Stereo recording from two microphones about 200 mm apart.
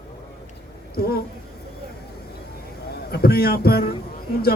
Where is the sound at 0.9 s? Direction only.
50° left (ahead or behind).